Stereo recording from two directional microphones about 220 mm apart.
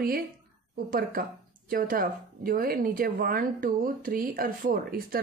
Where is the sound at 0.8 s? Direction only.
40° right (ahead or behind).